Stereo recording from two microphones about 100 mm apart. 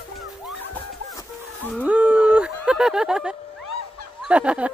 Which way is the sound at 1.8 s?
10° right (ahead or behind).